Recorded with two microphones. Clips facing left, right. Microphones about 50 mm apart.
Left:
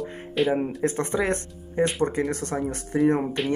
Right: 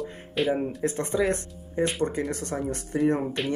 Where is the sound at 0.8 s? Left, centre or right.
Left.